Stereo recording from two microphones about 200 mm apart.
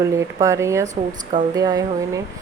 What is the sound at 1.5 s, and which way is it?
Speech, 20° right (ahead or behind).